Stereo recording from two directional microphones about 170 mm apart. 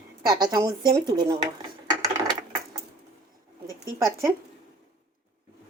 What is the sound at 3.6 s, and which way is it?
Speech, 20° right (ahead or behind).